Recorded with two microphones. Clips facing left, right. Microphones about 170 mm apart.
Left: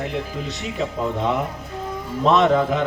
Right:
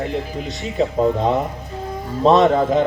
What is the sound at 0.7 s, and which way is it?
A man's voice, 35° right (ahead or behind).